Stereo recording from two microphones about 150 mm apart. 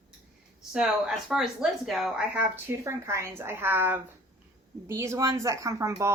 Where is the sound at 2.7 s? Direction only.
20° right (ahead or behind).